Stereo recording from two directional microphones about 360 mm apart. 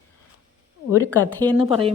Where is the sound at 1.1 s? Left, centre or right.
Centre.